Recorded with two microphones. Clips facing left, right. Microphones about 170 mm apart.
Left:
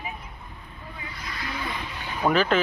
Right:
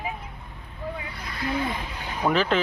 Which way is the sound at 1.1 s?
55° right (ahead or behind).